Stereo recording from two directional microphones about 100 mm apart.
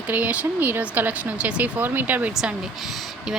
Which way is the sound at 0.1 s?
15° right (ahead or behind).